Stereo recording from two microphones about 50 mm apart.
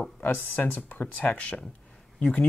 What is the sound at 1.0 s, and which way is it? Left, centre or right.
Speech, left.